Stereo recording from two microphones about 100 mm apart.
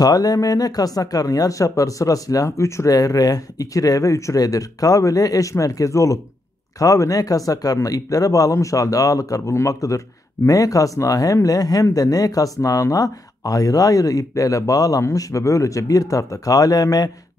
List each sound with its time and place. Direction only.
0.0 s speech: 40° left (ahead or behind)